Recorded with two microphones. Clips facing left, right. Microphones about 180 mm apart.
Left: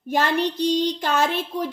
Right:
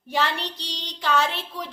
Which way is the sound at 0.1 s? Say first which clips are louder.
Left 5 dB; 50° left (ahead or behind).